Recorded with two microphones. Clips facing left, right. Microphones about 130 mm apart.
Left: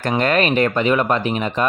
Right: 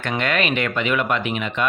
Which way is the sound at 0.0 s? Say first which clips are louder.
Left 5 dB; 40° left (ahead or behind).